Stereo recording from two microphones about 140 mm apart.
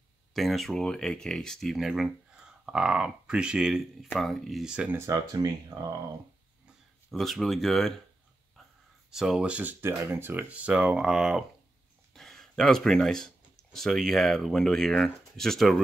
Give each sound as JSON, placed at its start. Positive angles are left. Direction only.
{"t": 0.3, "sound": "speech", "side_deg": 0}
{"t": 4.9, "sound": "speech", "side_deg": -25}
{"t": 7.1, "sound": "speech", "side_deg": 0}
{"t": 9.1, "sound": "speech", "side_deg": -5}
{"t": 12.1, "sound": "a sound", "side_deg": 5}
{"t": 13.7, "sound": "speech", "side_deg": 0}